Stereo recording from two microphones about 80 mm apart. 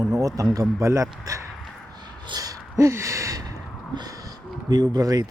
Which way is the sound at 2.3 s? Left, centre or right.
Right.